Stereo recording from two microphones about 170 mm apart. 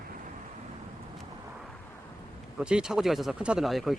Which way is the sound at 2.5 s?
5° right (ahead or behind).